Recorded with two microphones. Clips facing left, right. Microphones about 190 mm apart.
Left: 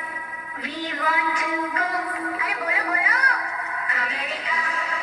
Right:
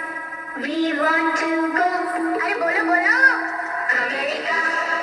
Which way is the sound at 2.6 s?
45° right (ahead or behind).